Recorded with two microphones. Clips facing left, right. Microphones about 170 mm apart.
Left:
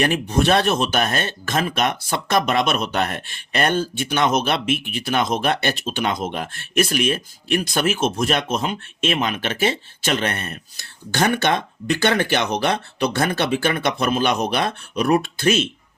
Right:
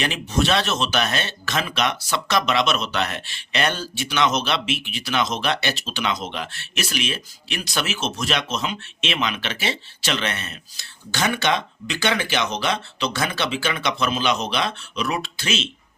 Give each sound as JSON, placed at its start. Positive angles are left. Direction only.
{"t": 0.0, "sound": "speech", "side_deg": 50}